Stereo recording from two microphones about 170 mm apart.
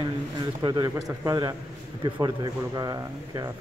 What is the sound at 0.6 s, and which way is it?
Speech, 25° right (ahead or behind).